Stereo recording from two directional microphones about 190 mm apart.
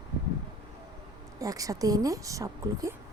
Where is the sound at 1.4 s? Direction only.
20° right (ahead or behind).